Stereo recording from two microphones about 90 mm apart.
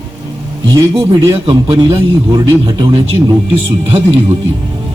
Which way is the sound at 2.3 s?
55° right (ahead or behind).